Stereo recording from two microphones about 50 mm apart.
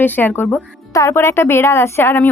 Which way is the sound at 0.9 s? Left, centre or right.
Left.